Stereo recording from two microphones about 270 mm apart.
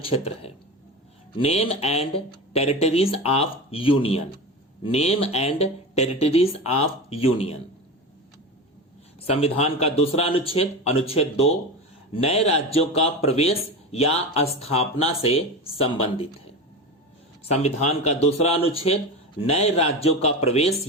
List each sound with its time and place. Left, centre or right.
0.0 s speech: left
9.2 s speech: left
17.5 s speech: left